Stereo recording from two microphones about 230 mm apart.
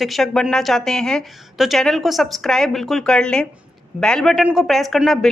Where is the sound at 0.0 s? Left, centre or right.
Centre.